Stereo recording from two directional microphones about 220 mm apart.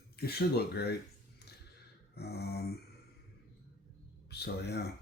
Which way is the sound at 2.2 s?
45° left (ahead or behind).